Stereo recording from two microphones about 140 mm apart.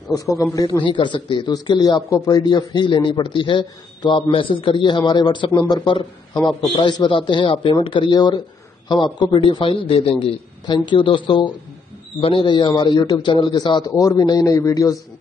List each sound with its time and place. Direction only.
0.1 s speech: 25° left (ahead or behind)
0.8 s speech: 35° left (ahead or behind)